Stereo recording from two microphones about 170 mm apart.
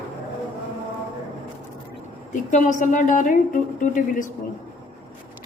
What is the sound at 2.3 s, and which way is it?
A woman's voice, 45° left (ahead or behind).